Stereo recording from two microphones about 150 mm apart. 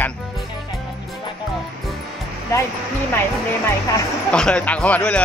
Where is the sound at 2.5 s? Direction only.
20° left (ahead or behind).